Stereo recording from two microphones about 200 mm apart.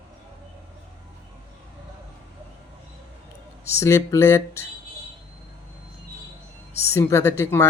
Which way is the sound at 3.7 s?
15° left (ahead or behind).